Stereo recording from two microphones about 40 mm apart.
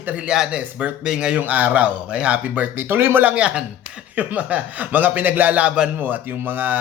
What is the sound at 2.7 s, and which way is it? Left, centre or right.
Speech, right.